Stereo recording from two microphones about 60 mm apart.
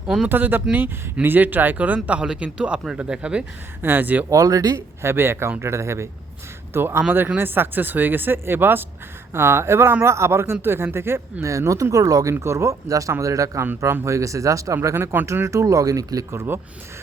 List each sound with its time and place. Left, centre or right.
0.3 s speech: right
2.0 s speech: centre
3.8 s speech: right
4.3 s speech: right
5.0 s speech: right
5.6 s speech: right
11.4 s speech: right
12.3 s speech: right
14.8 s speech: right
16.3 s speech: right